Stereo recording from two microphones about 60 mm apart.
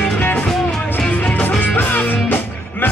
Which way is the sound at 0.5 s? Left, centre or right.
Centre.